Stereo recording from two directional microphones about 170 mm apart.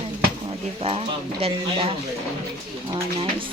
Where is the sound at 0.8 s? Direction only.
35° right (ahead or behind).